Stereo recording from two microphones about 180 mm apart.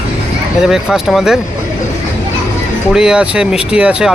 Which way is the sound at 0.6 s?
5° right (ahead or behind).